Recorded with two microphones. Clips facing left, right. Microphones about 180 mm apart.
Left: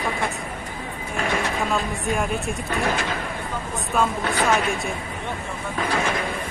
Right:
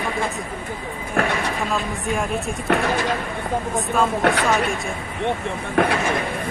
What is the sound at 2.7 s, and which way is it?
Speech, 70° right (ahead or behind).